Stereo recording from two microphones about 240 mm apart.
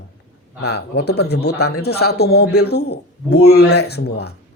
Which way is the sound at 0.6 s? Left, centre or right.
Left.